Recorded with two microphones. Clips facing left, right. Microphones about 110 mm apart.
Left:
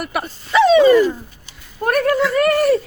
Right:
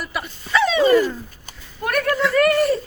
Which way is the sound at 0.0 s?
60° left (ahead or behind).